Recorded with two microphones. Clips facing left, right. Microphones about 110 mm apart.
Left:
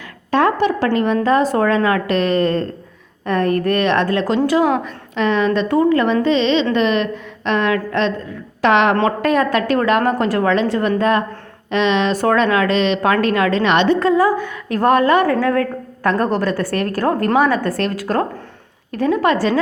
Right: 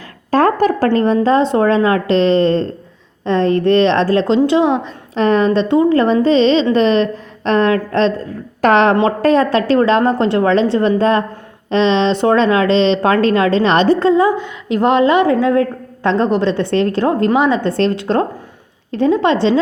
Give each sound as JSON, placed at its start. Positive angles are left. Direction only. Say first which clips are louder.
{"t": 0.3, "sound": "a woman's voice", "louder": "right 3 dB", "side_deg": -40}